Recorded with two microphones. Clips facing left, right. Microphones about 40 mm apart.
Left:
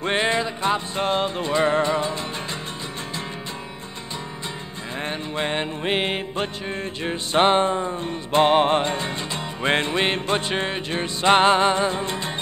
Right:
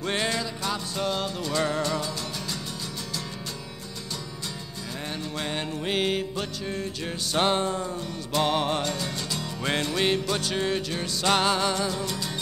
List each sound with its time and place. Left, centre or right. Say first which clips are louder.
0.0 s music: left 6 dB; left
5.0 s music: left 6 dB; left